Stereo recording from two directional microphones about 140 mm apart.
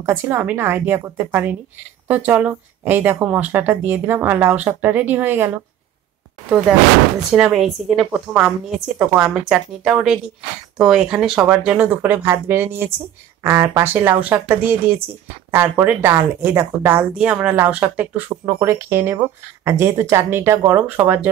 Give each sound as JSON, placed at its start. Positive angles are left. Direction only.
{"t": 0.0, "sound": "speech", "side_deg": -15}
{"t": 7.2, "sound": "speech", "side_deg": -5}
{"t": 18.3, "sound": "speech", "side_deg": -25}